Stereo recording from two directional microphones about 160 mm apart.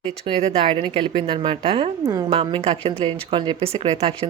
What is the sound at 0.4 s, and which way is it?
Speech, 35° right (ahead or behind).